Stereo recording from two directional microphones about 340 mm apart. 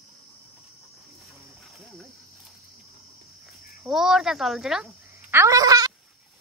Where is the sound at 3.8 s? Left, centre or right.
Centre.